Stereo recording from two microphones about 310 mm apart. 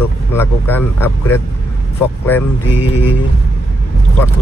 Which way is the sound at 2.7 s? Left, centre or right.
Left.